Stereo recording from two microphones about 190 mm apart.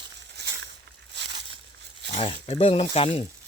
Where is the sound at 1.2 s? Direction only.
65° right (ahead or behind).